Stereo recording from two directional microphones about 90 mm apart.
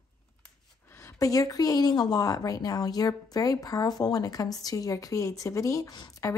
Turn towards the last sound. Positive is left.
turn(degrees=45)  # may be behind; listen again after turning